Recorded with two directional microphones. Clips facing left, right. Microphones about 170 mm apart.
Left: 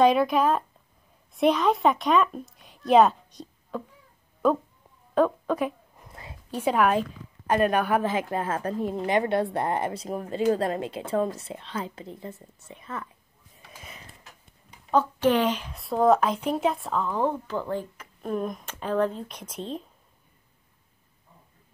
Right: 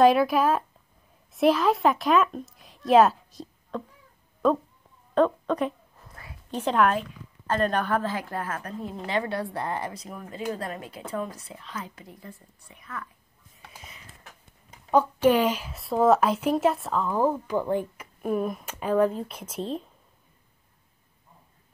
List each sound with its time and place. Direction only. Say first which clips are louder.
0.0 s a woman's voice: right 1 dB; centre (ahead or behind)
5.9 s a sound: left 2 dB; 20° left (ahead or behind)
6.5 s a woman's voice: left 1 dB; 10° left (ahead or behind); by 13.1 s 25° left (ahead or behind)
14.9 s speech: right 2 dB; 10° right (ahead or behind)